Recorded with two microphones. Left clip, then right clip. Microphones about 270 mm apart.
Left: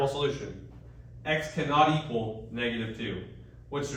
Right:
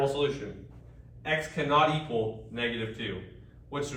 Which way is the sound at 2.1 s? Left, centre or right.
Right.